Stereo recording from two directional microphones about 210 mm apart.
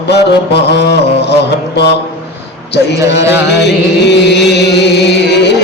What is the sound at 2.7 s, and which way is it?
Speech, 55° left (ahead or behind).